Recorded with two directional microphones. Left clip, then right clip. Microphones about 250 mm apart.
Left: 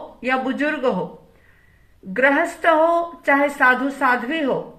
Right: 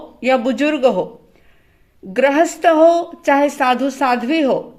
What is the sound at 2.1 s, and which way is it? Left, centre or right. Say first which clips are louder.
Speech: right 3 dB; right.